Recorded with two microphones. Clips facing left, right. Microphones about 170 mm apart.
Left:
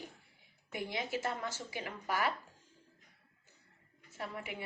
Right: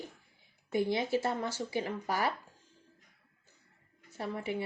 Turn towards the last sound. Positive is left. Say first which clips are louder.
# right 7 dB
turn(degrees=-30)  # may be behind; listen again after turning